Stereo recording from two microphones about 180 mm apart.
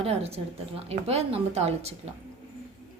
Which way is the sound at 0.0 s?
35° right (ahead or behind).